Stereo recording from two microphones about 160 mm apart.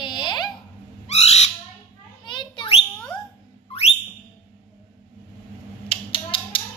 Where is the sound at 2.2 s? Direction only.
30° left (ahead or behind).